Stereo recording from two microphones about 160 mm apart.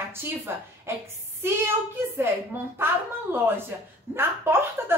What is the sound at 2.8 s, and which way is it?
A woman's voice, 15° right (ahead or behind).